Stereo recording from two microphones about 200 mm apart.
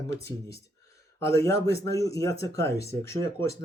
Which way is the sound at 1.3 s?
15° left (ahead or behind).